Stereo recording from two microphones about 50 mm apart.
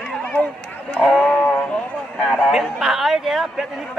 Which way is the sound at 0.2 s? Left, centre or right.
Left.